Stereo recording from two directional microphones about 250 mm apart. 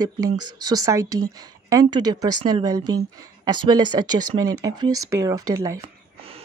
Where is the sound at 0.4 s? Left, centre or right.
Right.